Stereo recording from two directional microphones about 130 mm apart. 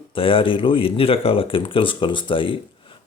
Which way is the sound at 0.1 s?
45° left (ahead or behind).